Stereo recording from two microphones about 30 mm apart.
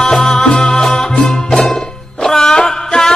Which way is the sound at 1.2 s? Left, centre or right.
Centre.